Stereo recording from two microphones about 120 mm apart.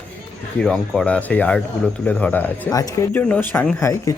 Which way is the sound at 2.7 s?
30° left (ahead or behind).